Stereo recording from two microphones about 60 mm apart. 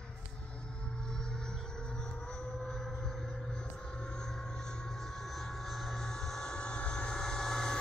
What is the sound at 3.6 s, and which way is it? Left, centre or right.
Vehicle, centre.